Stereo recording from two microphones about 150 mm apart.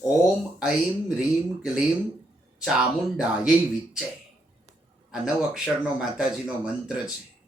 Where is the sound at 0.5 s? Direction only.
5° right (ahead or behind).